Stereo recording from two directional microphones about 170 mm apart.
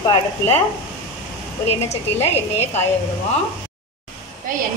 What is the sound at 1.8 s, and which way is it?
Speech, 40° left (ahead or behind).